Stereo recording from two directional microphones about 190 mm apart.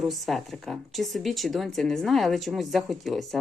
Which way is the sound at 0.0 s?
Centre (ahead or behind).